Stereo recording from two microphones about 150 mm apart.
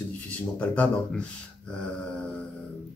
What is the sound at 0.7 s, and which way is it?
Speech, 10° left (ahead or behind).